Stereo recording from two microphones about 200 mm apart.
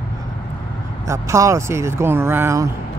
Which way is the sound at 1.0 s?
15° right (ahead or behind).